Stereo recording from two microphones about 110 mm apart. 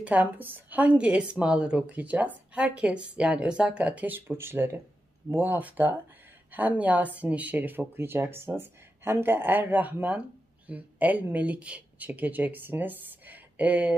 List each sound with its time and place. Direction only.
0.0 s speech: 15° right (ahead or behind)